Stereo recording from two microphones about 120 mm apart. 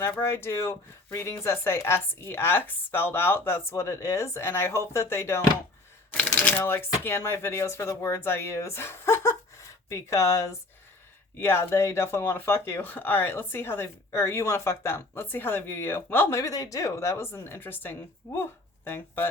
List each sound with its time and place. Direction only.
0.0 s speech: 20° left (ahead or behind)
16.4 s speech: 30° left (ahead or behind)